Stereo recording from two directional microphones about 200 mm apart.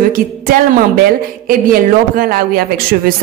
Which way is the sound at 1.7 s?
45° right (ahead or behind).